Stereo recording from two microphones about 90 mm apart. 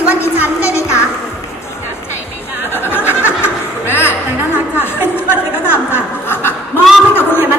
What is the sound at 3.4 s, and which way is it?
Music, 25° left (ahead or behind).